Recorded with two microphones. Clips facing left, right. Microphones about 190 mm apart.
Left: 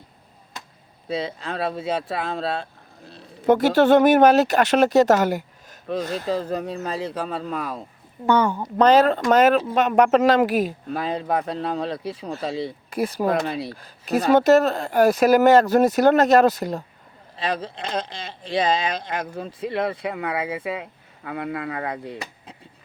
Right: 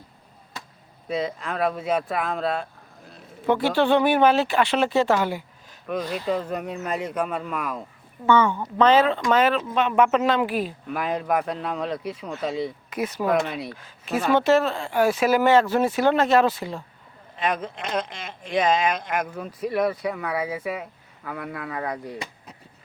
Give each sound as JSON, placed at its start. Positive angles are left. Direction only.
{"t": 1.0, "sound": "speech", "side_deg": 30}
{"t": 8.4, "sound": "speech", "side_deg": 10}
{"t": 8.8, "sound": "speech", "side_deg": 40}
{"t": 10.8, "sound": "speech", "side_deg": 30}
{"t": 21.8, "sound": "speech", "side_deg": 25}